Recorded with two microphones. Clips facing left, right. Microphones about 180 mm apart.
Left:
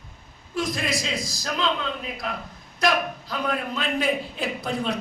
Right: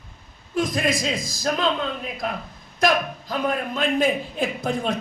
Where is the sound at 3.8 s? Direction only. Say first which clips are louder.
Right 6 dB; 45° right (ahead or behind).